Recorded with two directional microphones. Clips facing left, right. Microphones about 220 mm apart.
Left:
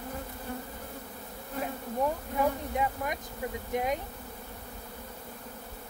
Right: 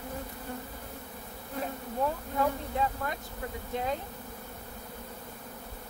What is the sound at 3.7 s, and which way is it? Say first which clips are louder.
Speech: left 2 dB; 15° left (ahead or behind).